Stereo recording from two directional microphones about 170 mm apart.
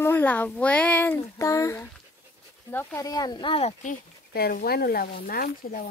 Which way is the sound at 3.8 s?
55° left (ahead or behind).